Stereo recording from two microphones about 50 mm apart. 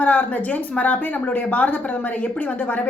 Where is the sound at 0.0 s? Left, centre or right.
Left.